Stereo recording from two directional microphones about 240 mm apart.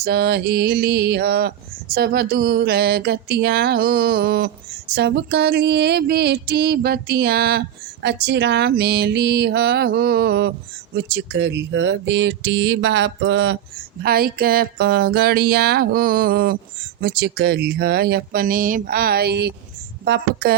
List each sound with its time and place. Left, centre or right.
0.0 s speech: right
4.9 s a sound: right
10.9 s speech: right